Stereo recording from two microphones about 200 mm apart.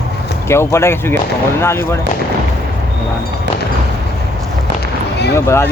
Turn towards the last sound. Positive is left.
turn(degrees=15)  # may be behind; listen again after turning